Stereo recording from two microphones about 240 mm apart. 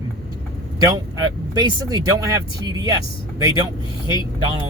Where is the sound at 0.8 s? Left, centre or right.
Centre.